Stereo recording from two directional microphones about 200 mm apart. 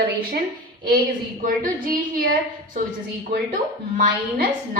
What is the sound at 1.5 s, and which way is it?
Speech, 45° right (ahead or behind).